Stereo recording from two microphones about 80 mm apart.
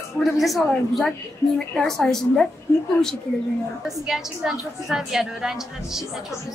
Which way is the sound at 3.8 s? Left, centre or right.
Centre.